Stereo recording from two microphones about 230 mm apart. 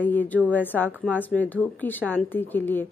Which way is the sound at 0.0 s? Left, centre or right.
Centre.